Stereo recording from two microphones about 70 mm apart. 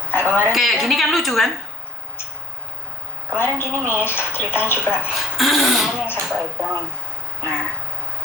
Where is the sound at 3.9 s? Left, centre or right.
Left.